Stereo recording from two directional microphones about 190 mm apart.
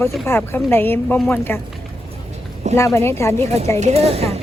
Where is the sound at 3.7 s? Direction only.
35° right (ahead or behind).